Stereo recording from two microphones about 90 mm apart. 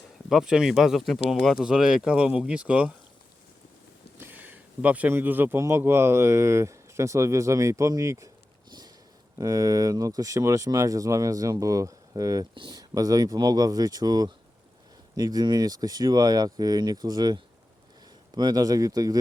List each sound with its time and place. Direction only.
0.3 s speech: 5° right (ahead or behind)
4.2 s a sound: 20° right (ahead or behind)
5.1 s speech: 20° right (ahead or behind)
9.4 s speech: 40° right (ahead or behind)